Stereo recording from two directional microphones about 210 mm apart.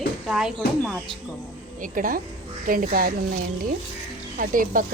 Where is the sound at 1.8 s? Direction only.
40° right (ahead or behind).